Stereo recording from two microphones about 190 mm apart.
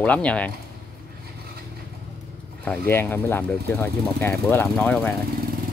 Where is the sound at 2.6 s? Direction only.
10° left (ahead or behind).